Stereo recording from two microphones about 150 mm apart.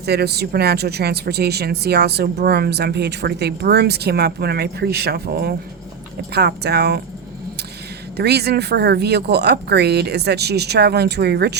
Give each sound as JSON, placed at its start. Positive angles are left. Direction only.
{"t": 0.0, "sound": "speech", "side_deg": -90}
{"t": 8.1, "sound": "speech", "side_deg": -90}